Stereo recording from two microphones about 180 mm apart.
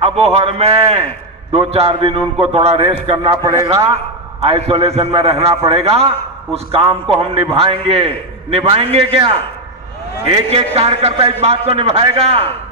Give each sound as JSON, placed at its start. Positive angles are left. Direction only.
{"t": 0.0, "sound": "a man's voice", "side_deg": -35}